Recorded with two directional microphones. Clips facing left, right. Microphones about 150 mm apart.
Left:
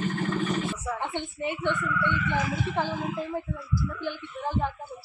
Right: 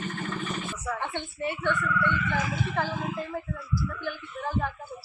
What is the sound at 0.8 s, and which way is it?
Speech, 20° left (ahead or behind).